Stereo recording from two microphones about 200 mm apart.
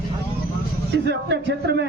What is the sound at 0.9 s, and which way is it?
Speech, 60° right (ahead or behind).